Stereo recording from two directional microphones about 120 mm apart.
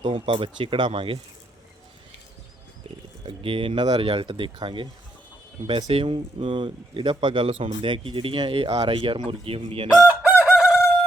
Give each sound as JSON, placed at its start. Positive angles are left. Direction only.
{"t": 0.0, "sound": "speech", "side_deg": -40}
{"t": 3.2, "sound": "speech", "side_deg": -50}
{"t": 5.9, "sound": "speech", "side_deg": -50}
{"t": 10.0, "sound": "chicken", "side_deg": -15}